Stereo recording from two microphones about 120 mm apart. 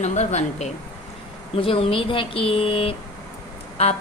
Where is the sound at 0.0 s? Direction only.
75° left (ahead or behind).